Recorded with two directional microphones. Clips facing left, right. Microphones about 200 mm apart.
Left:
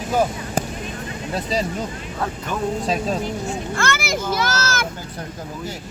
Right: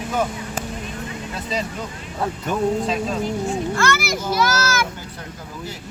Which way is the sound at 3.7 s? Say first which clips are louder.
Right 1 dB; 50° left (ahead or behind).